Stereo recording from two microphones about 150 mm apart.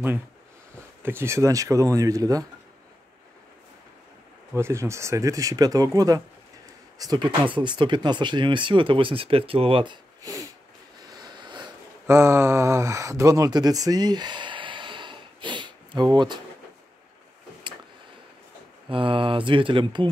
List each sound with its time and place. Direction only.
1.0 s speech: 15° right (ahead or behind)
4.6 s speech: 20° right (ahead or behind); by 9.9 s 35° right (ahead or behind)
10.2 s a sound: 25° right (ahead or behind)
12.1 s speech: 15° right (ahead or behind)
18.9 s speech: 35° right (ahead or behind)